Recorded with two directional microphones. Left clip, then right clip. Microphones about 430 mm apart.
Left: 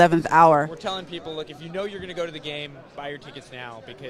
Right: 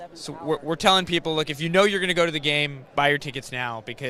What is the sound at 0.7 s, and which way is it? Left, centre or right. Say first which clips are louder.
A man's voice: right 11 dB; right.